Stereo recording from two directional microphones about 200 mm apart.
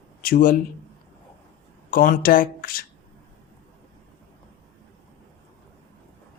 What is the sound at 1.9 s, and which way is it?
Speech, 45° left (ahead or behind).